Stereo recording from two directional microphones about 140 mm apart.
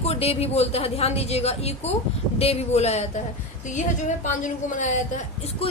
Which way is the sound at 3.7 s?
60° left (ahead or behind).